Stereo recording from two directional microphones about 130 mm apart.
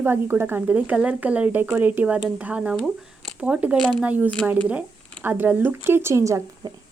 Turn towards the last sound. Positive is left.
turn(degrees=-30)  # may be behind; listen again after turning